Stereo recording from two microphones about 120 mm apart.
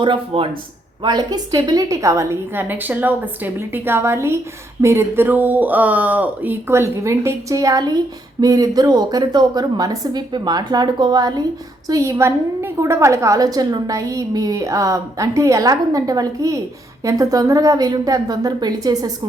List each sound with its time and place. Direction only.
0.0 s a woman's voice: 45° right (ahead or behind)